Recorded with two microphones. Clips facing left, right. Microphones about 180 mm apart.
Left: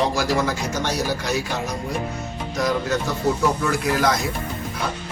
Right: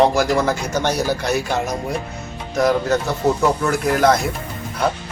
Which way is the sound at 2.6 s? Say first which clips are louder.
Right 5 dB; 50° right (ahead or behind).